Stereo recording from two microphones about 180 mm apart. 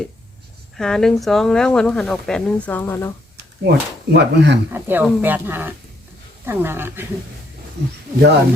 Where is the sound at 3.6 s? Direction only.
70° right (ahead or behind).